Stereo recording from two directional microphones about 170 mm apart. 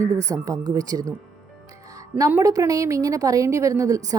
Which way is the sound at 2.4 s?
20° right (ahead or behind).